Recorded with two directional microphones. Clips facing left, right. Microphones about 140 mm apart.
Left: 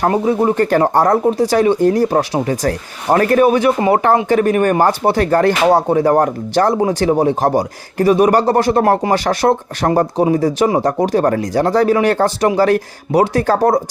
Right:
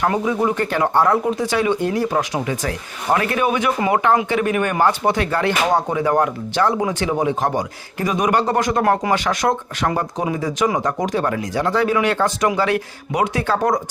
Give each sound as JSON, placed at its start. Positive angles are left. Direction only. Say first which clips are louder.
{"t": 0.0, "sound": "speech", "louder": "left 5 dB", "side_deg": 35}